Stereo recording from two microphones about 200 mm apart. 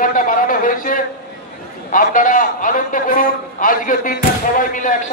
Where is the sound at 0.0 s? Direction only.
45° left (ahead or behind).